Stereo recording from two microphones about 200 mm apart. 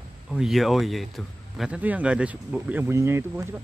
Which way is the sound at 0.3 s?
Centre (ahead or behind).